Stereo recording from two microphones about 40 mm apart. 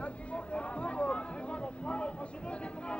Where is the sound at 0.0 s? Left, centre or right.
Left.